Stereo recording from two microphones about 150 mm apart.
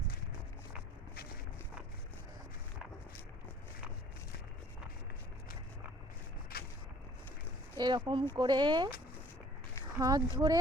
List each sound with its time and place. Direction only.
6.5 s a sound: 85° left
7.8 s speech: 30° right (ahead or behind)
10.0 s speech: 25° right (ahead or behind)